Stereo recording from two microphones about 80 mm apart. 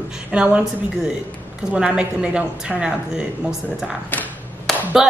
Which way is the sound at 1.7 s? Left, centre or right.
Centre.